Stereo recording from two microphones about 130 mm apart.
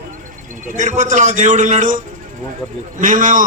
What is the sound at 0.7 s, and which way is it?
A man's voice, 65° right (ahead or behind).